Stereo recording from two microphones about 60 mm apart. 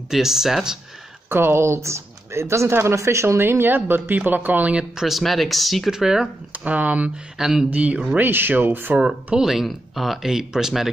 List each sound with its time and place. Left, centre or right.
0.1 s speech: centre
1.3 s speech: right
4.9 s speech: centre
5.9 s speech: centre
6.5 s speech: right
7.3 s speech: centre
7.7 s speech: right
8.2 s speech: right
8.9 s speech: centre